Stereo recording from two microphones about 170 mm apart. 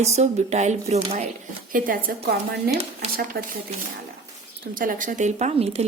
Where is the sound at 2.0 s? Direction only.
65° right (ahead or behind).